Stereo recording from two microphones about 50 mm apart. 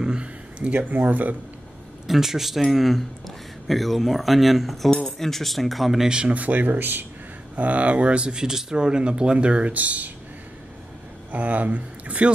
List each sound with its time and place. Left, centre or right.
0.0 s a sound: centre
0.8 s speech: right
2.0 s a man's voice: centre
6.0 s speech: centre
6.3 s speech: right
7.5 s speech: right
11.3 s speech: right